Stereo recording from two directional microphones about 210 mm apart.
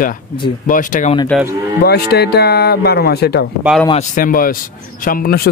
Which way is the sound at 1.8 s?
50° left (ahead or behind).